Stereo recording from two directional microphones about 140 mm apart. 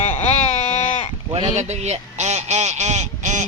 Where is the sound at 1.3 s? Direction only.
50° right (ahead or behind).